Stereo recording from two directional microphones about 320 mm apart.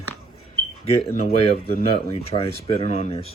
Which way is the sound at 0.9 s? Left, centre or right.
Centre.